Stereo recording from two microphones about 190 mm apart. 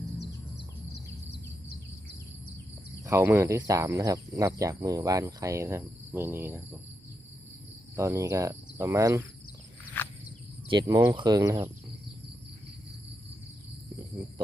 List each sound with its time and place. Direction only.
3.1 s speech: 15° right (ahead or behind)
7.9 s speech: 15° right (ahead or behind)
10.0 s a sound: 10° left (ahead or behind)
10.7 s speech: 25° right (ahead or behind)